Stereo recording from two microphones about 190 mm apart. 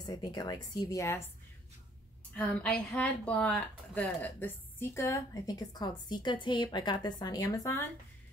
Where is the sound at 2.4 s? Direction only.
5° left (ahead or behind).